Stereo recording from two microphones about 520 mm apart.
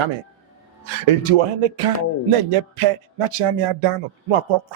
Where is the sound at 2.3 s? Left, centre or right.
Right.